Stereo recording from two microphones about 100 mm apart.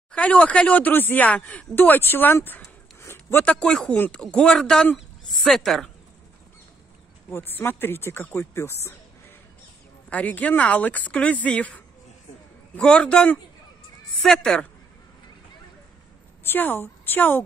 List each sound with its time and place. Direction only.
0.1 s speech: 15° left (ahead or behind)
3.4 s a woman's voice: 10° left (ahead or behind)
7.2 s speech: 20° left (ahead or behind)
10.0 s speech: 15° left (ahead or behind)
16.4 s a woman's voice: 20° left (ahead or behind)